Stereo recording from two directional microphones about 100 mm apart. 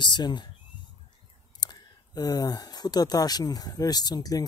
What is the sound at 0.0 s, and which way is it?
Speech, 45° left (ahead or behind).